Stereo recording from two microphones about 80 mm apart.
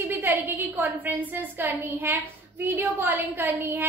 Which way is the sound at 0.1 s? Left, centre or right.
Right.